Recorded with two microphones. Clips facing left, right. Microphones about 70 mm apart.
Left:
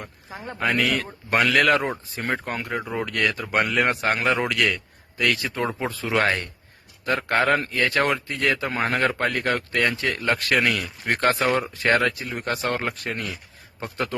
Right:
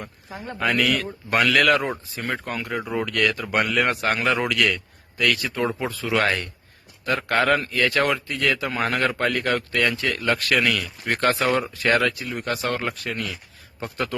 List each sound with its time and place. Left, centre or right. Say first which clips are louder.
0.0 s a man's voice: right 1 dB; centre
2.1 s speech: left 1 dB; left
2.6 s a man's voice: right 3 dB; centre